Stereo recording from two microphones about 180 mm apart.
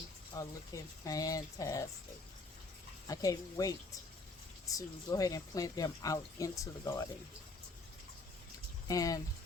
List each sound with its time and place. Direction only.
0.3 s speech: 20° left (ahead or behind)
3.1 s speech: 20° left (ahead or behind)
8.9 s speech: 20° left (ahead or behind)